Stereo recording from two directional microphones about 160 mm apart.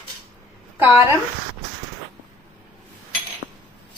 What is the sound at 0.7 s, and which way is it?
Speech, 15° right (ahead or behind).